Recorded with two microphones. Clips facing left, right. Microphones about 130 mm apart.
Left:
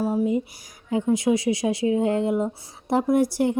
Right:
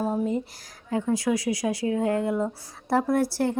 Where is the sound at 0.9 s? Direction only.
20° left (ahead or behind).